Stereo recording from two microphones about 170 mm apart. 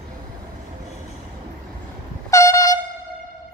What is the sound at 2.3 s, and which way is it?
Air horn, 20° left (ahead or behind).